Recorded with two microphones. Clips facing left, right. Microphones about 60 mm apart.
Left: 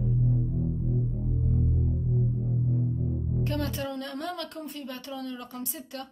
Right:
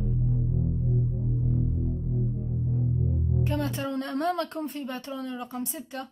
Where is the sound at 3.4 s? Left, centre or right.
Right.